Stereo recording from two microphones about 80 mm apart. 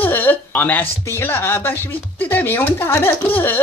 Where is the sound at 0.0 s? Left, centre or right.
Left.